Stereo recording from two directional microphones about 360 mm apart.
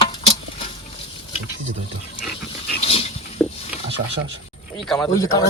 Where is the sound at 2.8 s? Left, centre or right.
Centre.